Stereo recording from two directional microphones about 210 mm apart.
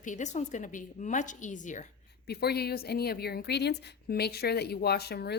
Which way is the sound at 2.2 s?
50° left (ahead or behind).